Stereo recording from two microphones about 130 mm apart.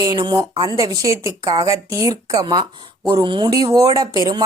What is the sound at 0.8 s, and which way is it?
Speech, 25° right (ahead or behind).